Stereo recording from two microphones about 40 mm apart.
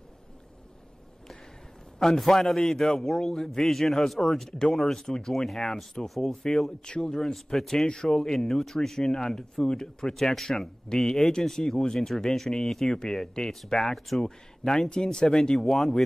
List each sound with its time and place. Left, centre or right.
2.0 s speech: centre
6.0 s speech: centre
6.8 s speech: left; by 14.2 s centre
14.2 s speech: centre